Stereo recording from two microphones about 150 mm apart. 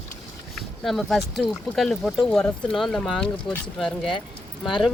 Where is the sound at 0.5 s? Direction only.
Centre (ahead or behind).